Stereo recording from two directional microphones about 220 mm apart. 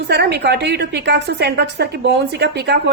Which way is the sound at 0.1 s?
50° right (ahead or behind).